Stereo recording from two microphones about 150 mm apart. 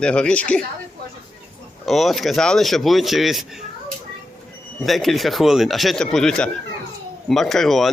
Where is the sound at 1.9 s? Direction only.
Centre (ahead or behind).